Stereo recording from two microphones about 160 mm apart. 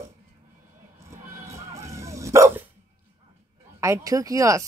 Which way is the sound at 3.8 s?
20° right (ahead or behind).